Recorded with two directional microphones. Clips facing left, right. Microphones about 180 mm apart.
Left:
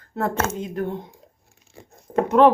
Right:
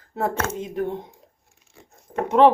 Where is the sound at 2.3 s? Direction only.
Centre (ahead or behind).